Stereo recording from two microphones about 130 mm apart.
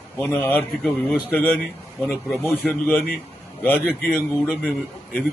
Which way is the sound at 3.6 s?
15° left (ahead or behind).